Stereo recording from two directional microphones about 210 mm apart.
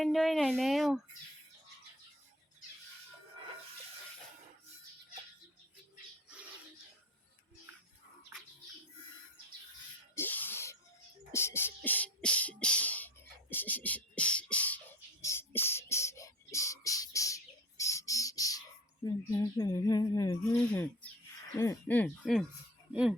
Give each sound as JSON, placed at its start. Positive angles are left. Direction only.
{"t": 0.0, "sound": "speech", "side_deg": 0}
{"t": 10.2, "sound": "a sound", "side_deg": 10}
{"t": 13.5, "sound": "beatboxing", "side_deg": 10}
{"t": 15.2, "sound": "bird", "side_deg": 10}
{"t": 19.0, "sound": "speech", "side_deg": 15}